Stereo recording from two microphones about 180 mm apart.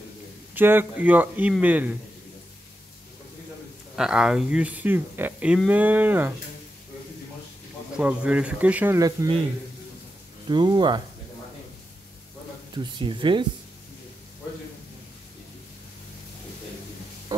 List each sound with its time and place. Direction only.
0.6 s speech: 10° right (ahead or behind)
3.9 s speech: 5° right (ahead or behind)
8.0 s speech: 5° right (ahead or behind)
10.5 s speech: 25° right (ahead or behind)
12.7 s speech: 25° right (ahead or behind)
17.3 s a sound: 20° right (ahead or behind)